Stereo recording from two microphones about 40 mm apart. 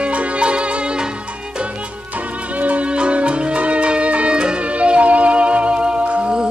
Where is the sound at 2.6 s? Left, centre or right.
Right.